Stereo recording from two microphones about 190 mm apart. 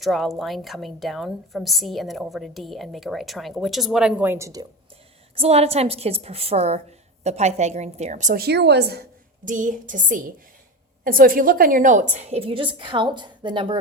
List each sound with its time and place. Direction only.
0.0 s a woman's voice: centre (ahead or behind); by 4.6 s 15° right (ahead or behind)
5.3 s a woman's voice: 30° right (ahead or behind)